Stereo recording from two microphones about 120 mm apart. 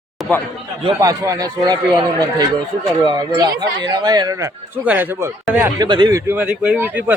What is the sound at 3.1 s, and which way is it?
Speech, 35° right (ahead or behind).